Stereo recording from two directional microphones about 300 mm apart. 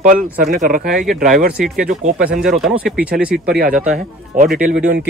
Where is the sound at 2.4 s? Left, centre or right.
Centre.